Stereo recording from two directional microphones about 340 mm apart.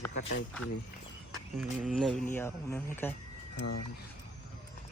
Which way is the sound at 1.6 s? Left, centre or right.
Centre.